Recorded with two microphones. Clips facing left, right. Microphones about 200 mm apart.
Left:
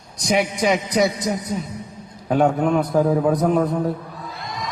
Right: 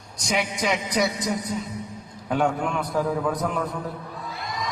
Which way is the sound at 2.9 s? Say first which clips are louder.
Left 4 dB; 25° left (ahead or behind).